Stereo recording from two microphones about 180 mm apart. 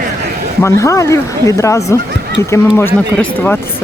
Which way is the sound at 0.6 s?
15° left (ahead or behind).